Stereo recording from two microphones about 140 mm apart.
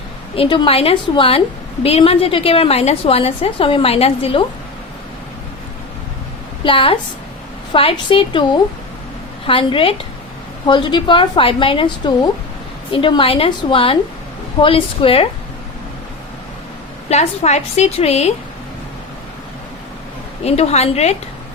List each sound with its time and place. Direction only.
0.3 s a woman's voice: 35° left (ahead or behind)
6.7 s speech: 40° left (ahead or behind)
17.1 s a woman's voice: 55° left (ahead or behind)
20.4 s a woman's voice: 50° left (ahead or behind)